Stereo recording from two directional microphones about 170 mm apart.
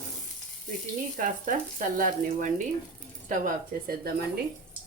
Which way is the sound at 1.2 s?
50° right (ahead or behind).